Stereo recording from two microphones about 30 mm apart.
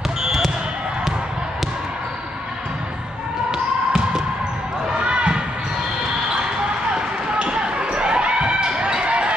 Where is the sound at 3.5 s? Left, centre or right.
Right.